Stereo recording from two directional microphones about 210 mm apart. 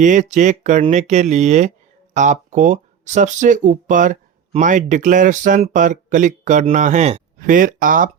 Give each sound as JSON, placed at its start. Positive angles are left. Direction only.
{"t": 0.0, "sound": "speech", "side_deg": -35}